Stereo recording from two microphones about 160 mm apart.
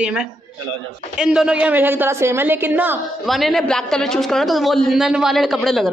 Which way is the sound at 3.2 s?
Centre (ahead or behind).